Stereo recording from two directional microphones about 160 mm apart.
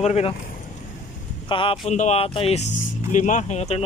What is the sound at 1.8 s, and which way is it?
Speech, 45° left (ahead or behind).